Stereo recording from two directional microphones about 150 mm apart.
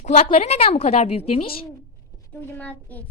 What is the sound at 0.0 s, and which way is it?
A woman's voice, 45° left (ahead or behind).